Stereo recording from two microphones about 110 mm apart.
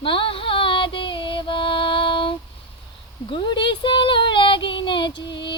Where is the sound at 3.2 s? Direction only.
50° left (ahead or behind).